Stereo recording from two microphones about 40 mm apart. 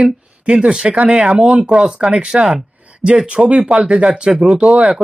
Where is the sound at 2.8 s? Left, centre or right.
Right.